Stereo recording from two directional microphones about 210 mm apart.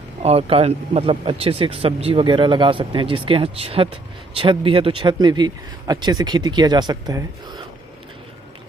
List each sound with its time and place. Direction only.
0.2 s speech: 30° right (ahead or behind)